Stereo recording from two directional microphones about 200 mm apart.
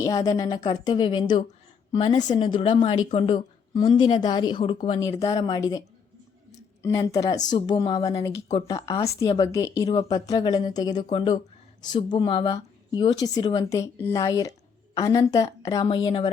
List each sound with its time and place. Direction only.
0.0 s speech: 20° left (ahead or behind)
6.5 s a sound: 15° left (ahead or behind)
7.5 s speech: 20° left (ahead or behind)